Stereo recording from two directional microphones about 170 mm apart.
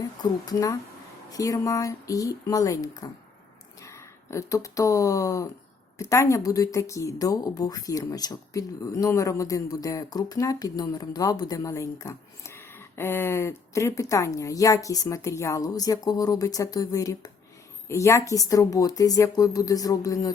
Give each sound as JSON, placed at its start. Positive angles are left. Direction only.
{"t": 0.2, "sound": "speech", "side_deg": 20}